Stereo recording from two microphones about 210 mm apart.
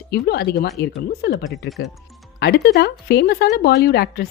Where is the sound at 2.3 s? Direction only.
50° left (ahead or behind).